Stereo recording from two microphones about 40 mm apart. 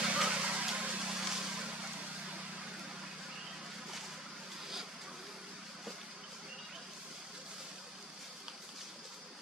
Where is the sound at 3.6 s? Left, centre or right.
Centre.